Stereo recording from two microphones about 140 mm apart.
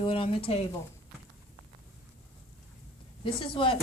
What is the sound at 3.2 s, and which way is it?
Speech, 40° left (ahead or behind).